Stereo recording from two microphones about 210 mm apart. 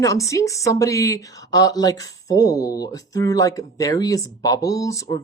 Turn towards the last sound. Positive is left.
turn(degrees=15)  # may be behind; listen again after turning